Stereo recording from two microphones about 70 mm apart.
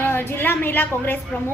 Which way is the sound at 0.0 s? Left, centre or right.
Left.